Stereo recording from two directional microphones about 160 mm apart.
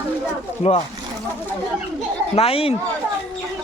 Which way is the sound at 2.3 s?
35° left (ahead or behind).